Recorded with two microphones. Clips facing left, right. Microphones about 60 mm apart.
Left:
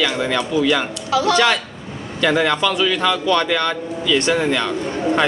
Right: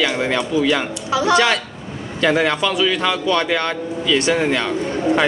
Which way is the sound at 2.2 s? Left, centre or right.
Centre.